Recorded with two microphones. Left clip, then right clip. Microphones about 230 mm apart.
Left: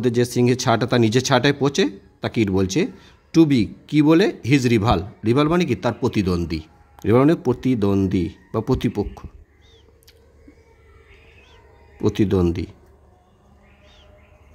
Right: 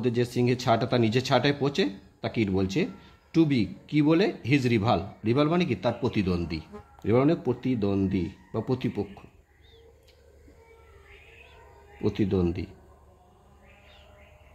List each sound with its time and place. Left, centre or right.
0.0 s speech: left
12.0 s speech: left